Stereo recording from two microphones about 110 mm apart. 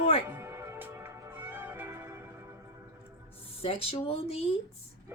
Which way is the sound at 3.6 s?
60° left (ahead or behind).